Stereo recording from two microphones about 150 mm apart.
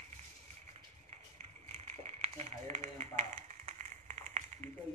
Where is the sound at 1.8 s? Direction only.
45° right (ahead or behind).